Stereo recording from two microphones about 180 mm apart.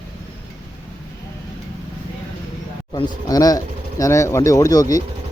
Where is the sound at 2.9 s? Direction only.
20° left (ahead or behind).